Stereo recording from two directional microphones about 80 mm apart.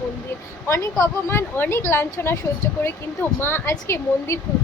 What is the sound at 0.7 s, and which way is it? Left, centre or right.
Speech, left.